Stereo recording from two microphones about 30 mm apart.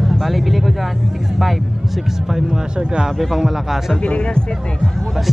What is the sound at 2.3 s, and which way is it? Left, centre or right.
Speech, centre.